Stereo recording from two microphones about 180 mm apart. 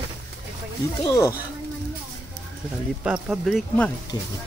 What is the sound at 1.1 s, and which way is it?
Speech, 20° left (ahead or behind).